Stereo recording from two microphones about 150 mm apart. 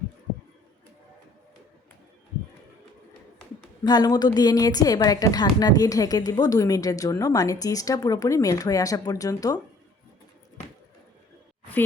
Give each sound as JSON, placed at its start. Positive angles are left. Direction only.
{"t": 3.8, "sound": "a woman's voice", "side_deg": 25}